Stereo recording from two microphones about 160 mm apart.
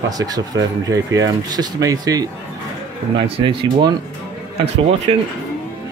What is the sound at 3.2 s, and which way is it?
Speech, 35° right (ahead or behind).